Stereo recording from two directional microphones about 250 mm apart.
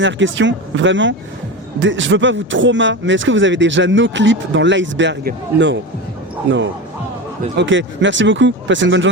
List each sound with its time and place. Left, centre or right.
0.0 s speech: right